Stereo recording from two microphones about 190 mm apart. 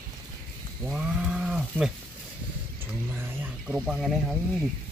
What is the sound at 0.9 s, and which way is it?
Speech, 5° right (ahead or behind).